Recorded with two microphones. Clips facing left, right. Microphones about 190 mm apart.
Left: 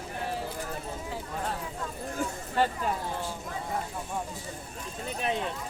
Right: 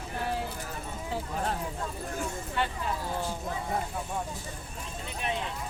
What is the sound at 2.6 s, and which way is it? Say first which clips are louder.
Speech: left 5 dB; 40° left (ahead or behind).